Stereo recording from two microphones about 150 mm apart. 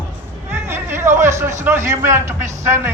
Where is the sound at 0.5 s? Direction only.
15° right (ahead or behind).